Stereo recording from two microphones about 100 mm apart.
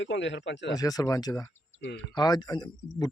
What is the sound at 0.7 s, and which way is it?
A man's voice, 35° left (ahead or behind).